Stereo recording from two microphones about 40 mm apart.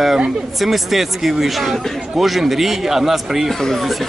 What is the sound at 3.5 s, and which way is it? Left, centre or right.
Speech, centre.